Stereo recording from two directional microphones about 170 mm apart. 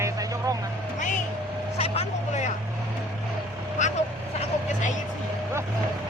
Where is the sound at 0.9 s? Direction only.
45° left (ahead or behind).